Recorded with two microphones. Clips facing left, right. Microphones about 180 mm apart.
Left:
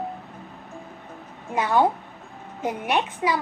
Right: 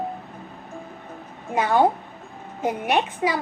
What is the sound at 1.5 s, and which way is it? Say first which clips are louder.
A woman's voice: right 2 dB; 50° right (ahead or behind).